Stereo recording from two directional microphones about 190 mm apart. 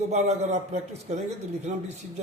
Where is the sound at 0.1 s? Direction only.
35° right (ahead or behind).